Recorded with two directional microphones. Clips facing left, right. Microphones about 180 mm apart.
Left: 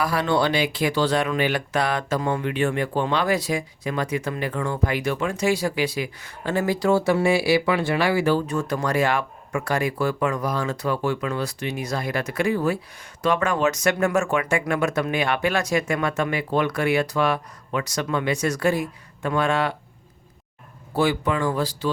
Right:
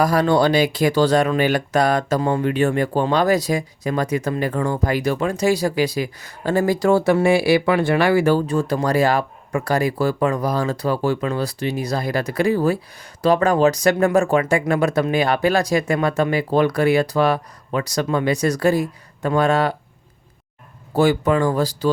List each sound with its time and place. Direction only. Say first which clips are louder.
0.0 s speech: right 5 dB; 40° right (ahead or behind)
8.4 s speech: right 5 dB; 30° right (ahead or behind)
20.9 s speech: right 5 dB; 45° right (ahead or behind)